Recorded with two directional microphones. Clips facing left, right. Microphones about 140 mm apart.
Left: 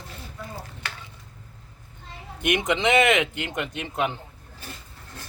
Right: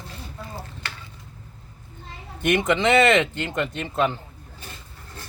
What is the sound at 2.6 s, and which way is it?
Speech, 15° left (ahead or behind).